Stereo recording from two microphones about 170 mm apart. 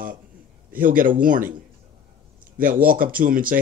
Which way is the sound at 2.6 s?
55° right (ahead or behind).